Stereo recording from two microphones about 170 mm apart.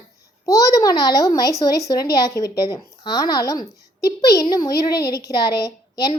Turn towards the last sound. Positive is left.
turn(degrees=25)  # may be behind; listen again after turning